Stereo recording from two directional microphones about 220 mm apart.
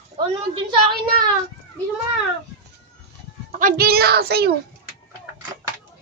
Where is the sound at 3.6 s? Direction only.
45° right (ahead or behind).